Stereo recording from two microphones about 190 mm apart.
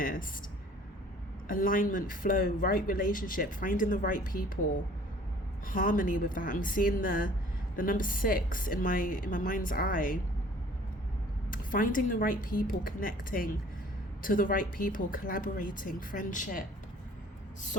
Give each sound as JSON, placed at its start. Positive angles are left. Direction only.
{"t": 0.0, "sound": "a sound", "side_deg": 45}
{"t": 1.5, "sound": "speech", "side_deg": 45}
{"t": 5.6, "sound": "speech", "side_deg": 45}
{"t": 11.5, "sound": "speech", "side_deg": 45}